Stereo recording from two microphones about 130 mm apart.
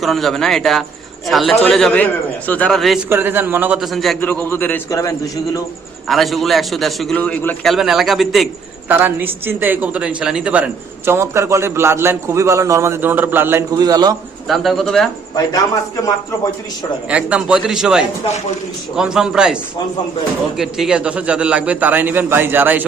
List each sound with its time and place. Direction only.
0.0 s a man's voice: centre (ahead or behind)
3.1 s a man's voice: 15° right (ahead or behind)
3.8 s a man's voice: centre (ahead or behind)
4.2 s a man's voice: 15° left (ahead or behind)
4.9 s a man's voice: 25° left (ahead or behind)
6.1 s a man's voice: centre (ahead or behind)
8.9 s a man's voice: 15° right (ahead or behind); by 14.2 s 30° right (ahead or behind)
14.4 s a man's voice: centre (ahead or behind)
17.1 s a man's voice: 10° right (ahead or behind)
20.6 s a man's voice: 5° right (ahead or behind)